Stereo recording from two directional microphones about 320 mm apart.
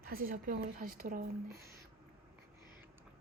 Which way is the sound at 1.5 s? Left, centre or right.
Right.